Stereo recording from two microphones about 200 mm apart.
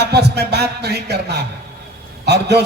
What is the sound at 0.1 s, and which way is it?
Speech, 55° right (ahead or behind).